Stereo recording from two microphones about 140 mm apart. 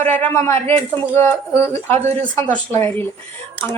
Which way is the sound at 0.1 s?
15° left (ahead or behind).